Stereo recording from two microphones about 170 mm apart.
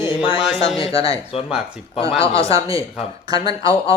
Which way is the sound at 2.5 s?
20° right (ahead or behind).